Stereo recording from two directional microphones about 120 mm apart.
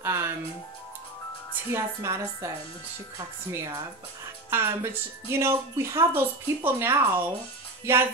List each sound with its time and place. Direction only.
0.0 s music: 20° right (ahead or behind)
1.7 s speech: 25° right (ahead or behind)